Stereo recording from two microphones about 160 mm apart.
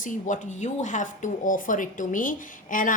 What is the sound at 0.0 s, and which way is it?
A woman's voice, 55° left (ahead or behind).